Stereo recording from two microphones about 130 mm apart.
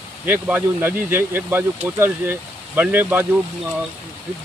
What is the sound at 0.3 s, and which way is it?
Speech, 15° right (ahead or behind).